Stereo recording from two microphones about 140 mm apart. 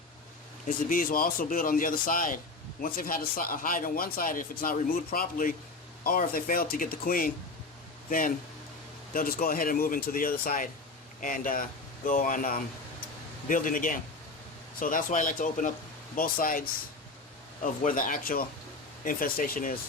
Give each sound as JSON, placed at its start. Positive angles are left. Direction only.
{"t": 0.7, "sound": "speech", "side_deg": 80}
{"t": 2.8, "sound": "speech", "side_deg": 90}
{"t": 9.1, "sound": "speech", "side_deg": 90}
{"t": 11.2, "sound": "speech", "side_deg": 80}
{"t": 13.5, "sound": "speech", "side_deg": 75}
{"t": 16.1, "sound": "speech", "side_deg": 90}
{"t": 17.6, "sound": "speech", "side_deg": 75}